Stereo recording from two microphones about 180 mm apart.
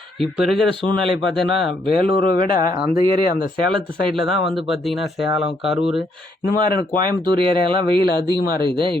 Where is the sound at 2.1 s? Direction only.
55° left (ahead or behind).